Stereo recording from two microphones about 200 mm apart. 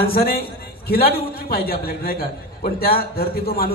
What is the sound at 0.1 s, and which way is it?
A man's voice, 50° left (ahead or behind).